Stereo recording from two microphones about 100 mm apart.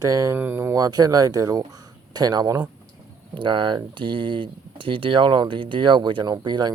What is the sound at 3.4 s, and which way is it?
Speech, 55° right (ahead or behind).